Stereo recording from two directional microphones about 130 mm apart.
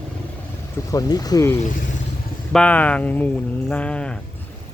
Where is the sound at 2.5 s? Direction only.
10° left (ahead or behind).